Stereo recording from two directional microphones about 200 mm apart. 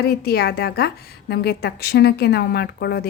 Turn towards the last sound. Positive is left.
turn(degrees=55)  # may be behind; listen again after turning